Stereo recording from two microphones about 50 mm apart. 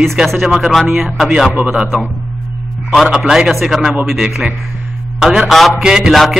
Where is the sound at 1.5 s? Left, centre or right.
Right.